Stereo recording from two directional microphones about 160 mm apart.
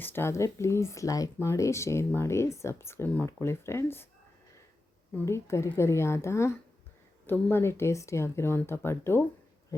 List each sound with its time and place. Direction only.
0.0 s speech: 15° left (ahead or behind)
5.1 s speech: 15° left (ahead or behind)